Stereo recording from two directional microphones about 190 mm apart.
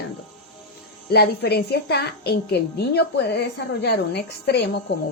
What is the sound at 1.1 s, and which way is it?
A woman's voice, 60° left (ahead or behind).